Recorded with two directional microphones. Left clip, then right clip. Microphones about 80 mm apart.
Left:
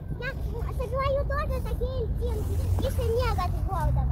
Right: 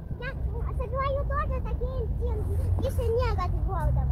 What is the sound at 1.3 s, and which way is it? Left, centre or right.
Speech, right.